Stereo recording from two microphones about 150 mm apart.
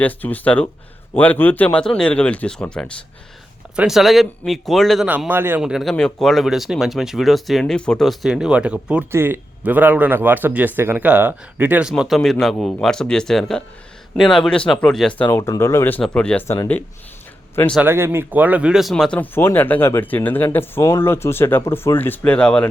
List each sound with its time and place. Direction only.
0.0 s speech: 10° left (ahead or behind)
5.0 s speech: 10° right (ahead or behind); by 15.3 s 5° left (ahead or behind)
15.3 s speech: 20° left (ahead or behind)
17.7 s speech: 15° right (ahead or behind); by 22.6 s 5° left (ahead or behind)